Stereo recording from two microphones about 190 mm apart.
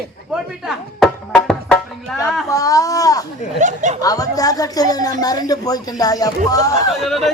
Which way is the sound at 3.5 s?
40° right (ahead or behind).